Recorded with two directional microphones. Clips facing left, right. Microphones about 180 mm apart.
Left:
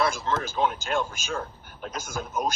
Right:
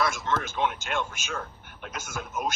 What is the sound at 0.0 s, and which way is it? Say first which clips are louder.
A man's voice: left 2 dB; 30° left (ahead or behind).